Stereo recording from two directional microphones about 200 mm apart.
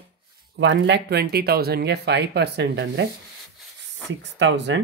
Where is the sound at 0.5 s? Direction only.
60° right (ahead or behind).